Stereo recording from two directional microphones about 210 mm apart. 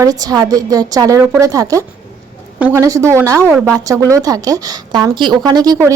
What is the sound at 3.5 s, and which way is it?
Speech, centre (ahead or behind).